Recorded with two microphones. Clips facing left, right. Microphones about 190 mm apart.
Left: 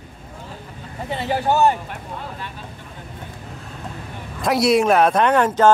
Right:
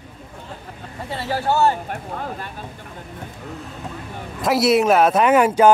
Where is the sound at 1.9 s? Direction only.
45° right (ahead or behind).